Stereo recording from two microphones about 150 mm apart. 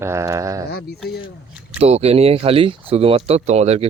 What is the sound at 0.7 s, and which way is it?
Speech, 90° left.